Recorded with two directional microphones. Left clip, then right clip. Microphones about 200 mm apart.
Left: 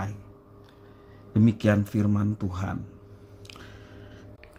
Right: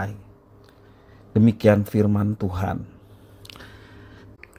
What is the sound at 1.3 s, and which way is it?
Speech, 25° right (ahead or behind).